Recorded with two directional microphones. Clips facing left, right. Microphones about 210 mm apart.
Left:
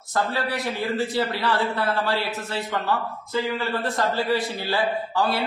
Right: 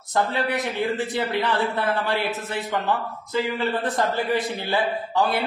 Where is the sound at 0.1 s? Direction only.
20° right (ahead or behind).